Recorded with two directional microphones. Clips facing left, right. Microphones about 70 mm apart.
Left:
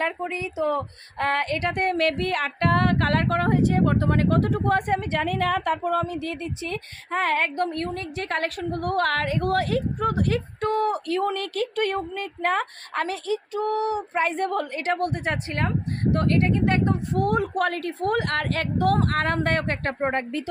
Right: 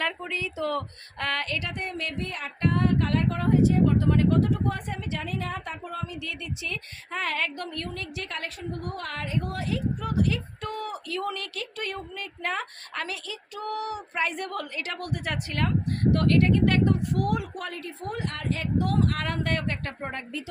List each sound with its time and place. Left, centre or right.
0.0 s a woman's voice: left